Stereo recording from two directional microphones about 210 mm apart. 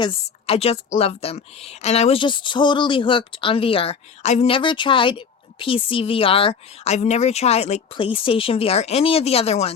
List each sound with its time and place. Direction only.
0.0 s a woman's voice: 30° left (ahead or behind)